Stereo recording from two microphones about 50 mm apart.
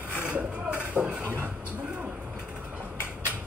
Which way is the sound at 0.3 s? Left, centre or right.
Right.